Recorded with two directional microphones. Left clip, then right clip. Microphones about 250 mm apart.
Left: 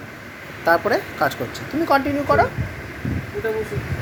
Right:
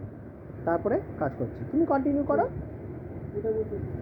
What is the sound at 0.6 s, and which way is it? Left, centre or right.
Speech, centre.